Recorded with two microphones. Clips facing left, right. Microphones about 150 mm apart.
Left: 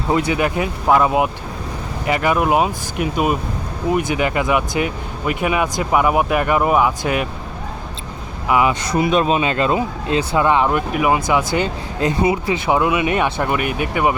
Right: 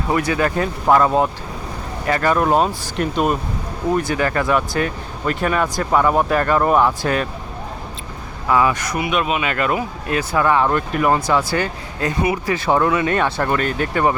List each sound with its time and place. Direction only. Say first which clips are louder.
0.1 s speech: left 1 dB; 20° left (ahead or behind)
8.4 s speech: even; 15° left (ahead or behind)